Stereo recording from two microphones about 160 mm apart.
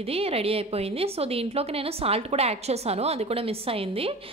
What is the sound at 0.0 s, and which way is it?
A woman's voice, 40° right (ahead or behind).